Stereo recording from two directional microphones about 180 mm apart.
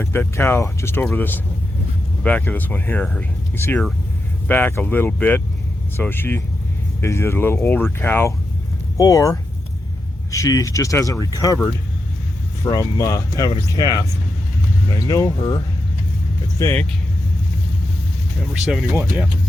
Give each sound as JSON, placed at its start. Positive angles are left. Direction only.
{"t": 0.0, "sound": "speech", "side_deg": 10}
{"t": 12.6, "sound": "speech", "side_deg": 20}
{"t": 16.6, "sound": "speech", "side_deg": 15}
{"t": 18.5, "sound": "speech", "side_deg": 0}